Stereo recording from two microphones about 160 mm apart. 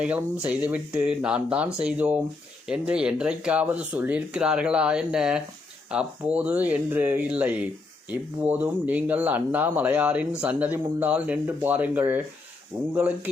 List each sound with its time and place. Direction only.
0.0 s speech: 10° right (ahead or behind)